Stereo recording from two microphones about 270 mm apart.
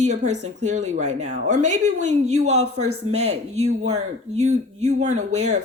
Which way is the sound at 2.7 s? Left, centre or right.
Right.